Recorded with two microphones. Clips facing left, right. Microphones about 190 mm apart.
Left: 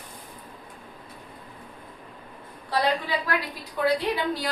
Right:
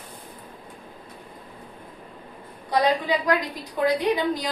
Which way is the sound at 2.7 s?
15° right (ahead or behind).